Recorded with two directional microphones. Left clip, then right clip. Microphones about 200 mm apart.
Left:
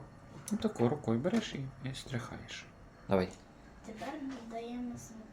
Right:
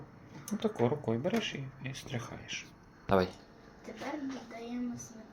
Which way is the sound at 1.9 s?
50° left (ahead or behind).